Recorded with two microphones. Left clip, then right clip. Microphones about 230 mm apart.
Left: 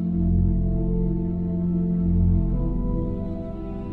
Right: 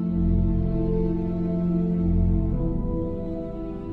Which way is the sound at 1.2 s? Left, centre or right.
Right.